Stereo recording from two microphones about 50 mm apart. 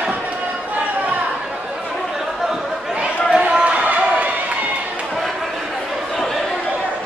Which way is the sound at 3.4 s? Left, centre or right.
Right.